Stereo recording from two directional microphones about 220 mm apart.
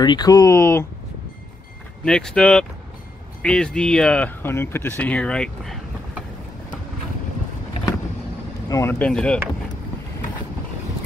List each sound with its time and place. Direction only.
0.0 s speech: 20° left (ahead or behind)
2.0 s speech: 5° left (ahead or behind)
8.6 s speech: 15° left (ahead or behind)